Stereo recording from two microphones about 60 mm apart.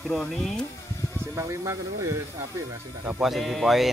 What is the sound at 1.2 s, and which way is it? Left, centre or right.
Speech, right.